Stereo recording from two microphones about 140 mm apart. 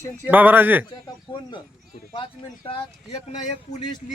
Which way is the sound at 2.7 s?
50° left (ahead or behind).